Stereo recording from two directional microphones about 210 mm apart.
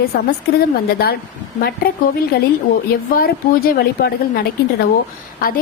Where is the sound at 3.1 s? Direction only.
45° left (ahead or behind).